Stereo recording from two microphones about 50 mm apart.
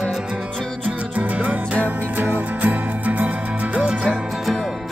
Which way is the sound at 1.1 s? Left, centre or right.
Right.